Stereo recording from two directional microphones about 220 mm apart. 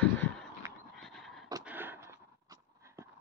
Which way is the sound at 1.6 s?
10° right (ahead or behind).